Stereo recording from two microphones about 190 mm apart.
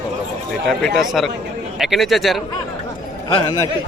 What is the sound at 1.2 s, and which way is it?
Speech, centre (ahead or behind).